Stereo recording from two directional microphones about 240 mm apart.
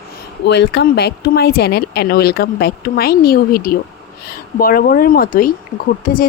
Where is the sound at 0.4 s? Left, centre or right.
Left.